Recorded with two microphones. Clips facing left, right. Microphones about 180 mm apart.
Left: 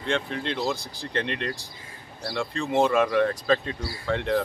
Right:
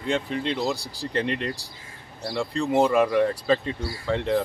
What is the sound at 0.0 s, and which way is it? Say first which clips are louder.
Speech: right 2 dB; 5° right (ahead or behind).